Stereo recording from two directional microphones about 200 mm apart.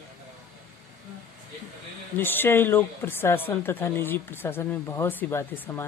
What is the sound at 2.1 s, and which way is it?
Speech, 10° left (ahead or behind).